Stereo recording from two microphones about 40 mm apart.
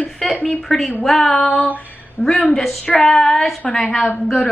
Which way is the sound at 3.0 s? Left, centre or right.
Centre.